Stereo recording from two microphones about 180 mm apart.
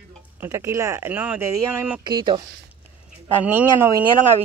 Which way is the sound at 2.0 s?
25° right (ahead or behind).